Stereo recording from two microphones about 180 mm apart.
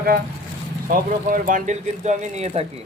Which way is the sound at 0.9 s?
50° right (ahead or behind).